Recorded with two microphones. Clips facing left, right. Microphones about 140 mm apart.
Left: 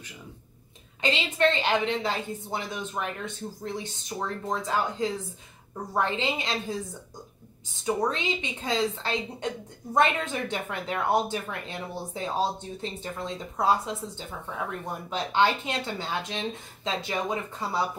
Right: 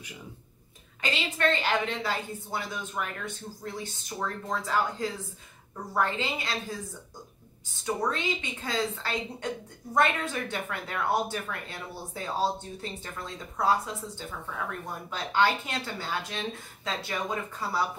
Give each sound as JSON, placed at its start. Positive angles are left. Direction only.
{"t": 1.0, "sound": "speech", "side_deg": 20}
{"t": 7.8, "sound": "speech", "side_deg": 20}